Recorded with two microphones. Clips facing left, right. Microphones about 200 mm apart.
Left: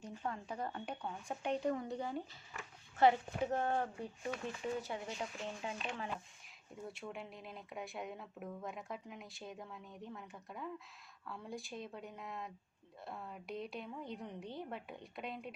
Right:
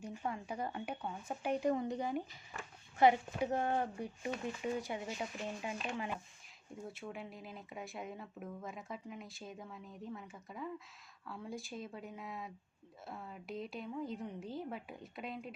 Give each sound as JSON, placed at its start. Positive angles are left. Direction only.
{"t": 0.0, "sound": "speech", "side_deg": -10}
{"t": 6.8, "sound": "speech", "side_deg": 0}